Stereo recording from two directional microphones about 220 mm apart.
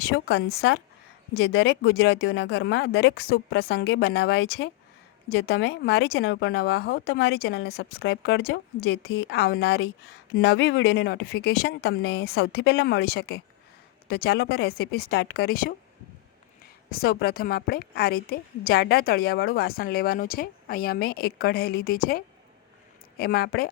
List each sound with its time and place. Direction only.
0.0 s speech: 45° left (ahead or behind)
16.9 s speech: 45° left (ahead or behind)